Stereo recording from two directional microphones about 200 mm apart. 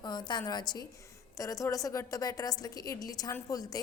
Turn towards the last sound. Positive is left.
turn(degrees=15)  # may be behind; listen again after turning